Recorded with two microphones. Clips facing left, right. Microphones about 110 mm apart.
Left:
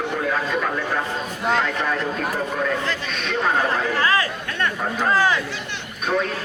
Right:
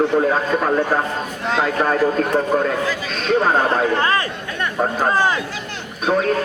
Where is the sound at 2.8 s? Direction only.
5° right (ahead or behind).